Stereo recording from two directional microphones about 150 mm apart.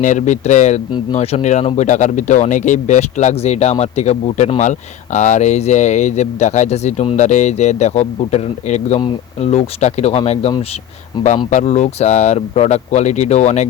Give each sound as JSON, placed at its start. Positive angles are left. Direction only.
{"t": 0.0, "sound": "speech", "side_deg": 55}
{"t": 11.5, "sound": "speech", "side_deg": 50}